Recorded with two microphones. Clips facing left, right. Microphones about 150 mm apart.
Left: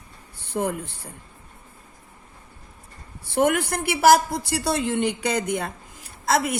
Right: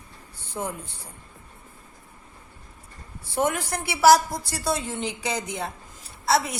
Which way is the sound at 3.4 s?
60° left (ahead or behind).